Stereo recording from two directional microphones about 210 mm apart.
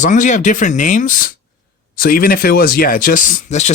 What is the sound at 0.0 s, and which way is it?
Speech, 35° left (ahead or behind).